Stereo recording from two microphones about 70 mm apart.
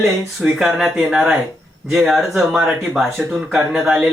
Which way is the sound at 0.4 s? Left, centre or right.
Centre.